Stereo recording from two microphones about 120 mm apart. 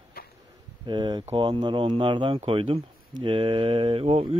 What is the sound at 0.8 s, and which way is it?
Speech, 40° right (ahead or behind).